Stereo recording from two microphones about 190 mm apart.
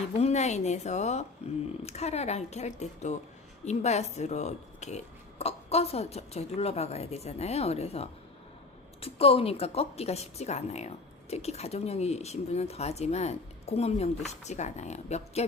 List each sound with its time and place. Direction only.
0.1 s a woman's voice: 35° left (ahead or behind)